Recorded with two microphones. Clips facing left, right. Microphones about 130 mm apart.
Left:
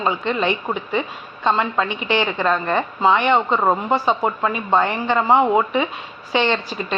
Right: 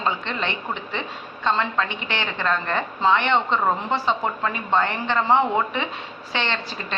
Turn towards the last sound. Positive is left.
turn(degrees=15)  # may be behind; listen again after turning